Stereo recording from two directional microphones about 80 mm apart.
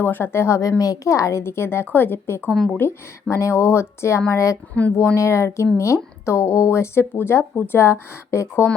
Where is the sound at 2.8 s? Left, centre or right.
Left.